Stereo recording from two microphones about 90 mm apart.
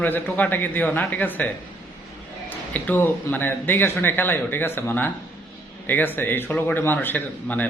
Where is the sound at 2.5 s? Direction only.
20° left (ahead or behind).